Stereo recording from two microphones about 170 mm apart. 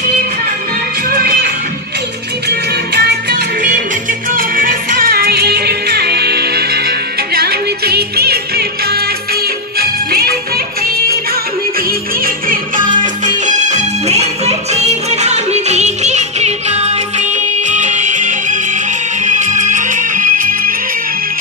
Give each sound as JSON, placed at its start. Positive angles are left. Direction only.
{"t": 2.4, "sound": "music", "side_deg": -70}
{"t": 4.3, "sound": "music", "side_deg": -55}
{"t": 13.5, "sound": "music", "side_deg": -45}